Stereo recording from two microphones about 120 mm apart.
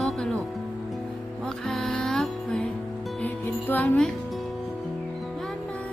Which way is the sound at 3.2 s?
15° left (ahead or behind).